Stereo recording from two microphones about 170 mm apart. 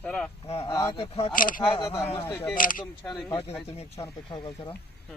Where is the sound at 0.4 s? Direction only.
35° left (ahead or behind).